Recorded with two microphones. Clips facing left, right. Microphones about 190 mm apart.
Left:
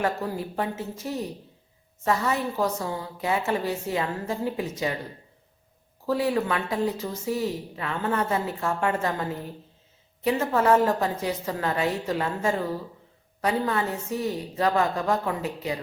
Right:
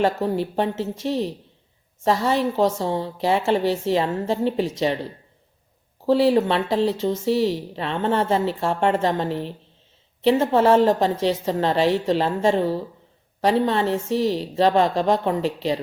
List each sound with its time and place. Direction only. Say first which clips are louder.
0.0 s a woman's voice: right 6 dB; 25° right (ahead or behind)
6.1 s a woman's voice: right 7 dB; 30° right (ahead or behind)
13.9 s a woman's voice: right 7 dB; 80° right
14.5 s a woman's voice: right 5 dB; 25° right (ahead or behind)